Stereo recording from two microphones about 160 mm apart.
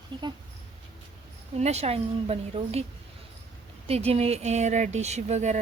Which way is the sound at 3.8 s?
40° right (ahead or behind).